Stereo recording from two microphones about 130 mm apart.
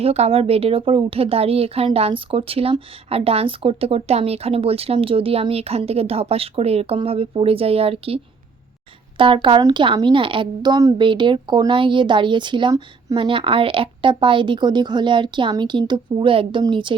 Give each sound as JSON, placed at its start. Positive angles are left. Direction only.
{"t": 0.0, "sound": "a woman's voice", "side_deg": -50}